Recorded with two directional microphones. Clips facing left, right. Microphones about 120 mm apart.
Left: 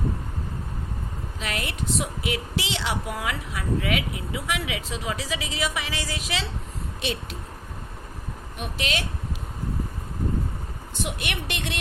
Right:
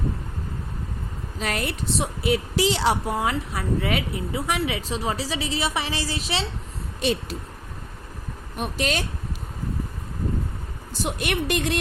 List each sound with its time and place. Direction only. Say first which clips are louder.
1.4 s speech: right 4 dB; 40° right (ahead or behind)
8.5 s speech: right 4 dB; 40° right (ahead or behind)
11.0 s speech: right 6 dB; 40° right (ahead or behind)